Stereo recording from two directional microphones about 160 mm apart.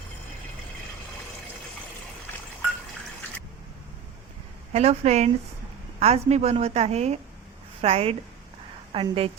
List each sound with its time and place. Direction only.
4.7 s a woman's voice: 40° right (ahead or behind)